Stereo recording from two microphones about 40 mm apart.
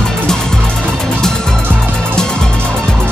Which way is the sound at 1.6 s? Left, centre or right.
Right.